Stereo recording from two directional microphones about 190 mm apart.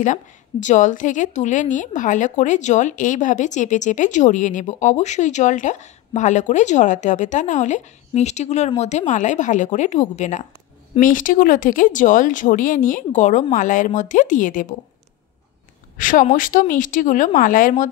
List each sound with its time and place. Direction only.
0.0 s a woman's voice: 40° left (ahead or behind)
16.0 s speech: 45° left (ahead or behind)